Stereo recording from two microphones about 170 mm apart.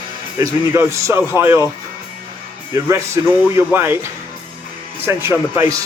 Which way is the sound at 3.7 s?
15° right (ahead or behind).